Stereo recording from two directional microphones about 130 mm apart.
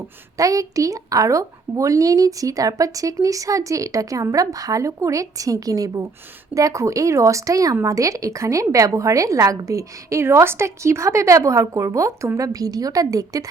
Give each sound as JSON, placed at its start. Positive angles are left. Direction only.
{"t": 0.3, "sound": "speech", "side_deg": -25}